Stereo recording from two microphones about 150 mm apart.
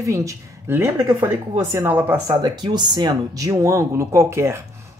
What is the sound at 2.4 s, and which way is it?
A woman's voice, 30° right (ahead or behind).